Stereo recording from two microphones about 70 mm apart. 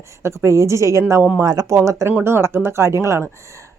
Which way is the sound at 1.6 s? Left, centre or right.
Right.